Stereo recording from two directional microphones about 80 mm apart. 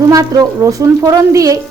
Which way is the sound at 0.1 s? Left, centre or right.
Right.